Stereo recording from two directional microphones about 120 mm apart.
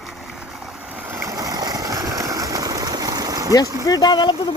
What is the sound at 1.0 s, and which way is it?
Vehicle, 15° right (ahead or behind).